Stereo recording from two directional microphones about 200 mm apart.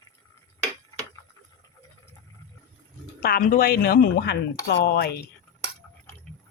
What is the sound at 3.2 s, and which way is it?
Speech, 50° left (ahead or behind).